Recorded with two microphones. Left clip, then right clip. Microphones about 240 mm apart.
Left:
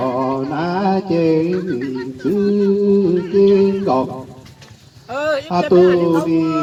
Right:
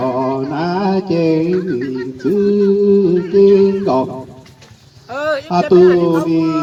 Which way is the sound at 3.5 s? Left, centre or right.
Right.